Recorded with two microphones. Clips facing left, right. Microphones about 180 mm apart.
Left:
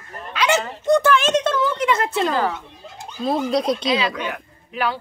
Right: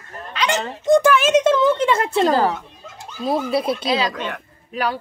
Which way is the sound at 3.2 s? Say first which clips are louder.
Even; 10° right (ahead or behind).